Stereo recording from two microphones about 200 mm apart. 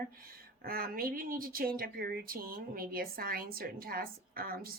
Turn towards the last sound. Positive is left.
turn(degrees=-45)  # may be behind; listen again after turning